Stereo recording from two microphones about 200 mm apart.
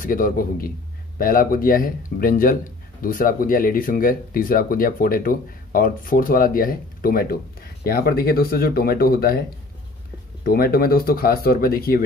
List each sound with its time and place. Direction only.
0.0 s speech: 45° left (ahead or behind)
10.4 s speech: 50° left (ahead or behind)